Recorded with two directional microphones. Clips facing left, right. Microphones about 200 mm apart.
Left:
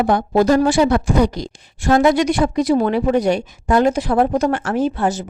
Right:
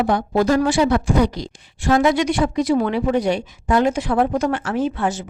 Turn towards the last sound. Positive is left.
turn(degrees=40)  # may be behind; listen again after turning